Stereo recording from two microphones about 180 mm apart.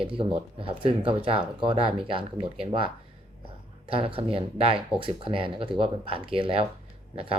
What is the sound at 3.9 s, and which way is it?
Speech, 30° right (ahead or behind).